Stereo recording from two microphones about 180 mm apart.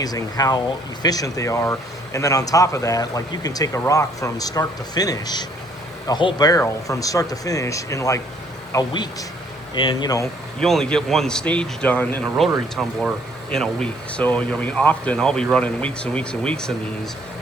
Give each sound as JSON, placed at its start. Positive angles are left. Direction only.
{"t": 0.0, "sound": "speech", "side_deg": 20}
{"t": 10.6, "sound": "speech", "side_deg": 0}